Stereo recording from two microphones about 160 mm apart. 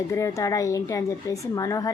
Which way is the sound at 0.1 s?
20° left (ahead or behind).